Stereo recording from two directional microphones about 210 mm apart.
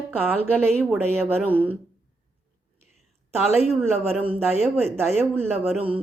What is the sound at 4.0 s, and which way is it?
Speech, 10° right (ahead or behind).